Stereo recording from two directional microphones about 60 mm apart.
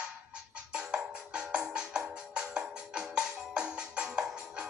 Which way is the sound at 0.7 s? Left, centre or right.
Centre.